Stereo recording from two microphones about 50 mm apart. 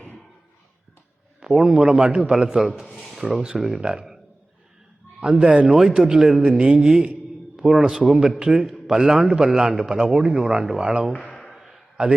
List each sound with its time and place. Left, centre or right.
1.6 s a man's voice: centre
5.2 s speech: right
5.5 s a man's voice: centre
7.6 s a man's voice: centre
11.4 s a sound: centre
12.0 s speech: centre